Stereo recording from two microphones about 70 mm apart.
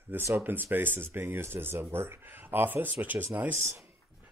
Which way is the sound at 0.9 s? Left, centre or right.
Right.